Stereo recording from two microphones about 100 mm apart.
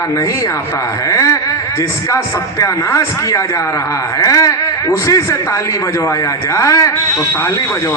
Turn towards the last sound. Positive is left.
turn(degrees=30)  # may be behind; listen again after turning